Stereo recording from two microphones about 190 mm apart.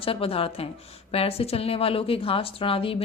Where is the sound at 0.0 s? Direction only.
30° left (ahead or behind).